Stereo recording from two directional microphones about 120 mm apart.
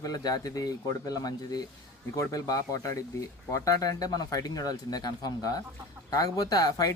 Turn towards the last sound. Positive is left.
turn(degrees=30)  # may be behind; listen again after turning